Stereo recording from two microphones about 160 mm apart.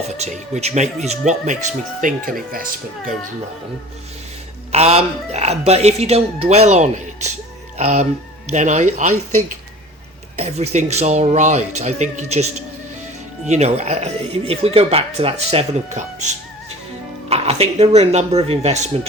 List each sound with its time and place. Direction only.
0.2 s speech: 45° right (ahead or behind); by 2.6 s 60° right (ahead or behind)
4.7 s speech: 40° right (ahead or behind)
10.3 s speech: 40° right (ahead or behind)
13.5 s speech: 45° right (ahead or behind)